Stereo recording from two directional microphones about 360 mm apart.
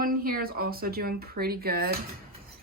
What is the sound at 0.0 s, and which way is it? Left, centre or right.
A woman's voice, right.